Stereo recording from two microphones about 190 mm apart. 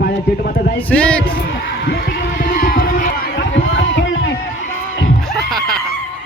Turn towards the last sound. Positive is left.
turn(degrees=0)  # may be behind; listen again after turning